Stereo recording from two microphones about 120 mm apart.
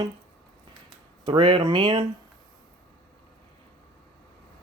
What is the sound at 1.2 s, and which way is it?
Speech, 40° right (ahead or behind).